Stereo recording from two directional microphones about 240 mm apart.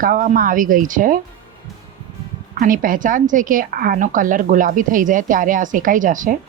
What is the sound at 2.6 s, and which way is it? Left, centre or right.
A woman's voice, right.